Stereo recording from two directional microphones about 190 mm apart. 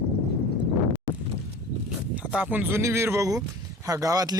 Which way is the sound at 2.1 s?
5° right (ahead or behind).